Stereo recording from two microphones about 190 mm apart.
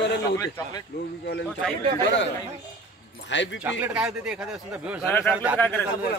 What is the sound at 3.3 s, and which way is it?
Speech, 70° left (ahead or behind).